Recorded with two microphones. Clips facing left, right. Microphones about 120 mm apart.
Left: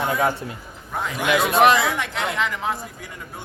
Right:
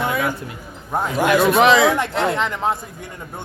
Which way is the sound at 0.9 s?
40° right (ahead or behind).